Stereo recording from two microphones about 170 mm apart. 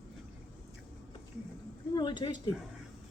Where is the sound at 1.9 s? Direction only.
25° left (ahead or behind).